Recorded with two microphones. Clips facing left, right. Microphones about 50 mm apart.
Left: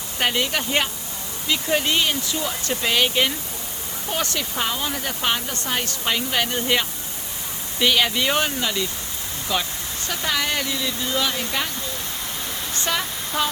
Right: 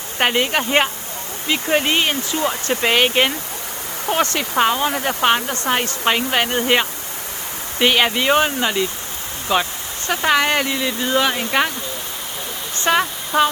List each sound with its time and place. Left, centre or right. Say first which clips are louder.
0.2 s speech: right 5 dB; right
8.2 s speech: right 5 dB; right
10.1 s speech: right 8 dB; right
12.7 s a sound: right 9 dB; right